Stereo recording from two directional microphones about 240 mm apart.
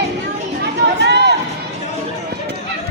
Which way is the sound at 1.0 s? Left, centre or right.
Right.